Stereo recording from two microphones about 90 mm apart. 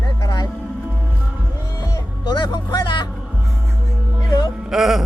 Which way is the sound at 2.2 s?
55° left (ahead or behind).